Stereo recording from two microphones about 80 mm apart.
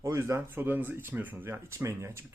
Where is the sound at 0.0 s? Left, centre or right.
Right.